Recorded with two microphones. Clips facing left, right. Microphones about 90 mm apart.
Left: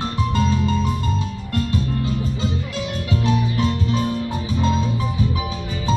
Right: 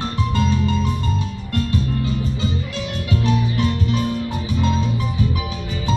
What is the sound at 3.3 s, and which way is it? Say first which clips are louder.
Music: even; 25° left (ahead or behind).